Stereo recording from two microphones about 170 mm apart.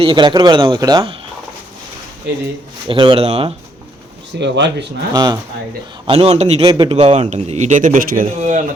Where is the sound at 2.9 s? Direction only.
30° right (ahead or behind).